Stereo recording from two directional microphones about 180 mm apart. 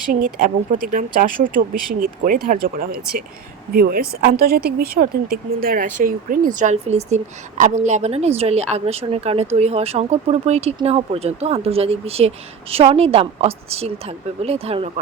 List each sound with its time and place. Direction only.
0.1 s a woman's voice: 50° right (ahead or behind); by 14.8 s 35° right (ahead or behind)